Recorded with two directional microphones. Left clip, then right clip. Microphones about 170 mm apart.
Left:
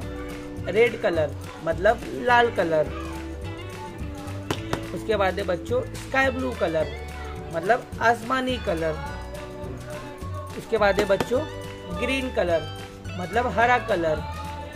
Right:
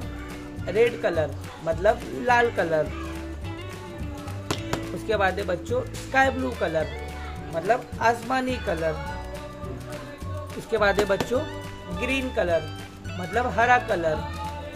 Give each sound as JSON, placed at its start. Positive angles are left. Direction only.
{"t": 0.7, "sound": "speech", "side_deg": 10}
{"t": 4.5, "sound": "speech", "side_deg": 5}
{"t": 10.7, "sound": "speech", "side_deg": 0}